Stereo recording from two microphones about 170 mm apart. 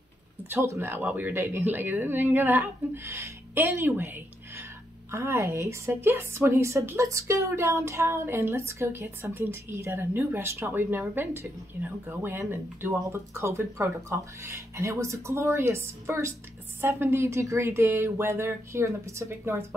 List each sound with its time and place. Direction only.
0.5 s a woman's voice: 15° right (ahead or behind)